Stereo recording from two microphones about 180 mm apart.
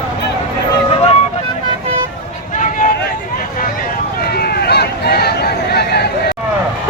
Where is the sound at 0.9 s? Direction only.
35° left (ahead or behind).